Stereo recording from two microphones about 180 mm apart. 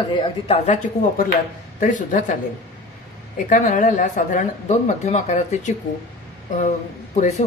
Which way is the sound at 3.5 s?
45° left (ahead or behind).